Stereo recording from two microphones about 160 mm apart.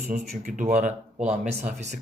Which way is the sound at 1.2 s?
45° right (ahead or behind).